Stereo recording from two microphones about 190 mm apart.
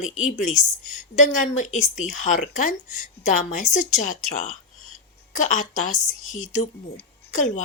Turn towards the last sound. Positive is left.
turn(degrees=35)  # may be behind; listen again after turning